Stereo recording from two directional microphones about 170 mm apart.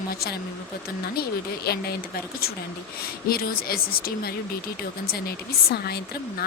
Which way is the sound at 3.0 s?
60° left (ahead or behind).